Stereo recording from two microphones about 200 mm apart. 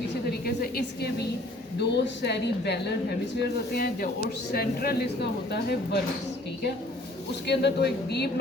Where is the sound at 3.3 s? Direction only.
55° left (ahead or behind).